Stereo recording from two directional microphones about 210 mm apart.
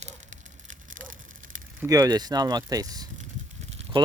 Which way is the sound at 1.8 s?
15° right (ahead or behind).